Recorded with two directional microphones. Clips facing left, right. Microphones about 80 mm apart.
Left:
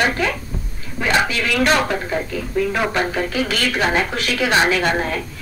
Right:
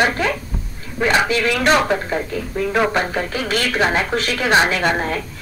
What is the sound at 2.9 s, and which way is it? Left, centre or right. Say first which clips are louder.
A woman's voice: even; right.